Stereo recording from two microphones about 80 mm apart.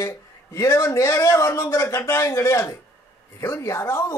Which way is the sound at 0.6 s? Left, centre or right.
Left.